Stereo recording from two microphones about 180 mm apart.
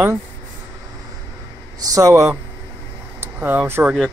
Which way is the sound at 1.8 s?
20° right (ahead or behind).